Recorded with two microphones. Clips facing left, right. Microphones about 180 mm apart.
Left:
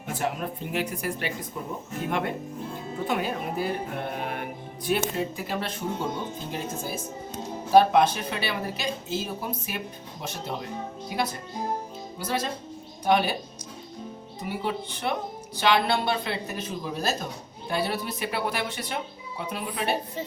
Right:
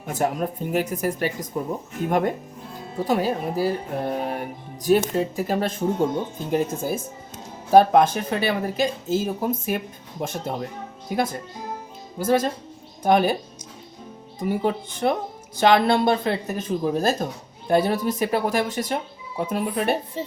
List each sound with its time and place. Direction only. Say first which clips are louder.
0.1 s speech: right 5 dB; 45° right (ahead or behind)
3.0 s music: right 6 dB; 35° right (ahead or behind)
5.1 s speech: right 6 dB; 40° right (ahead or behind)
7.7 s speech: right 4 dB; 45° right (ahead or behind)
14.4 s speech: right 7 dB; 45° right (ahead or behind)